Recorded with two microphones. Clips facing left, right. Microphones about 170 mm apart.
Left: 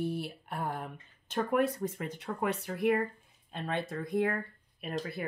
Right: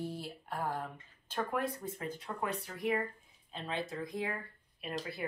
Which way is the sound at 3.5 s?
55° left (ahead or behind).